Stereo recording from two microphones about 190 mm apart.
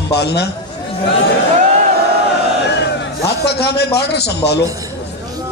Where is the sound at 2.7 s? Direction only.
60° left (ahead or behind).